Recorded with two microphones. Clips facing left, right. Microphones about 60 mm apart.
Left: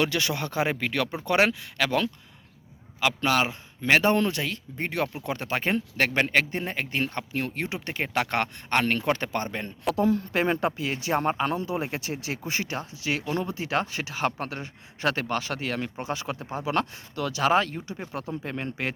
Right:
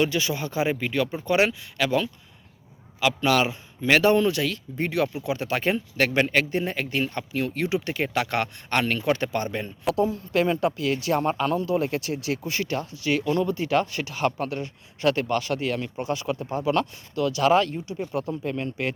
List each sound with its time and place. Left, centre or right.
0.0 s speech: left
3.0 s speech: left
14.3 s speech: left
15.3 s speech: left